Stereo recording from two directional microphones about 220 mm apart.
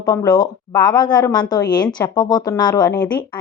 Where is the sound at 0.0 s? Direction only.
15° left (ahead or behind).